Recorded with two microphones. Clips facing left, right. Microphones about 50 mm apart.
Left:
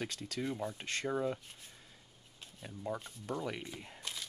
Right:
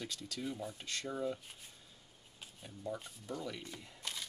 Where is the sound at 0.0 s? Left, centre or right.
Left.